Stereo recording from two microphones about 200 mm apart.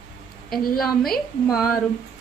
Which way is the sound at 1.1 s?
Centre (ahead or behind).